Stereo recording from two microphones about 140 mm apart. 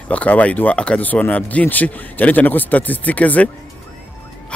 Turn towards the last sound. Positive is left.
turn(degrees=10)  # may be behind; listen again after turning